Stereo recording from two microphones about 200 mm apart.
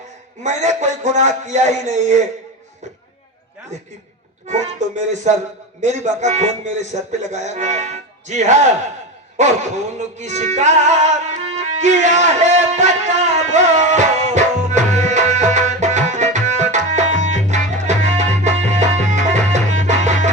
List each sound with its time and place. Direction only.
0.4 s speech: 35° right (ahead or behind)
4.4 s speech: 35° right (ahead or behind)
9.4 s music: 35° right (ahead or behind)